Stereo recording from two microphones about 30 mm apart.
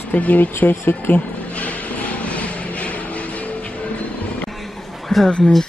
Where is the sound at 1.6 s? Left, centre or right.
Left.